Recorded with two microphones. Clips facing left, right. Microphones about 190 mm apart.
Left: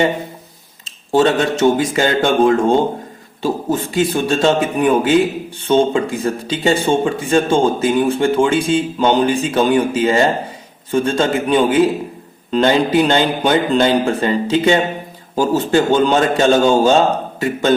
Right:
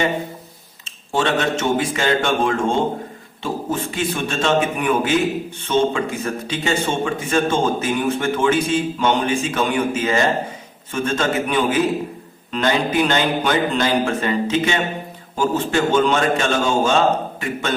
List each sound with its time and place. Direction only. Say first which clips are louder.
0.9 s speech: left 7 dB; 35° left (ahead or behind)